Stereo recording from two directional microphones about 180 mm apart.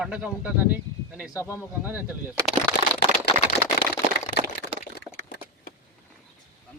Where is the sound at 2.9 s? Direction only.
65° left (ahead or behind).